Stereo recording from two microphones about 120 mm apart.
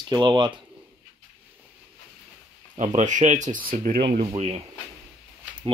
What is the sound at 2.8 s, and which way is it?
Speech, 70° right (ahead or behind).